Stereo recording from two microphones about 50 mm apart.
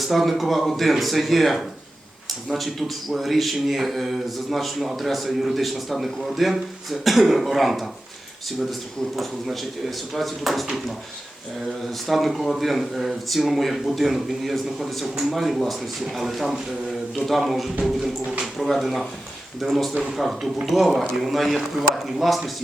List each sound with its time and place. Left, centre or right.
0.0 s a man's voice: centre
10.2 s a man's voice: centre
12.0 s a man's voice: centre
17.8 s a sound: centre
18.5 s a man's voice: centre